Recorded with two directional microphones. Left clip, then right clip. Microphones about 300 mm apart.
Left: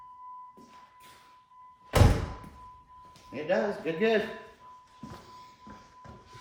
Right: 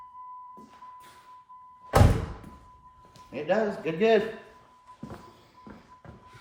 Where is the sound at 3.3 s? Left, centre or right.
Centre.